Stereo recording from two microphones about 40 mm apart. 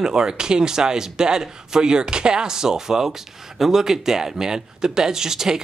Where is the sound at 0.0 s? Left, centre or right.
Centre.